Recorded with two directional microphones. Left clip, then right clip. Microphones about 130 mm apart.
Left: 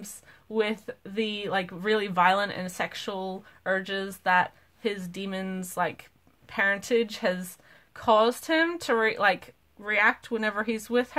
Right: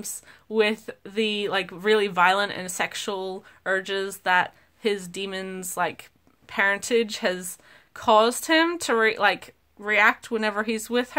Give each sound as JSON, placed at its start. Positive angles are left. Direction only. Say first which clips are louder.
{"t": 0.0, "sound": "speech", "louder": "right 7 dB", "side_deg": -30}